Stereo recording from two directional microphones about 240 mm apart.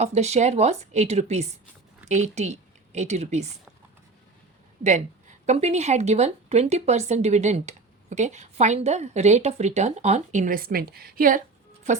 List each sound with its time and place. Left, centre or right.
0.0 s a woman's voice: right
4.8 s speech: right